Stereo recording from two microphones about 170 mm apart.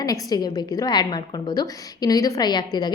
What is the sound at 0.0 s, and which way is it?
A woman's voice, 20° left (ahead or behind).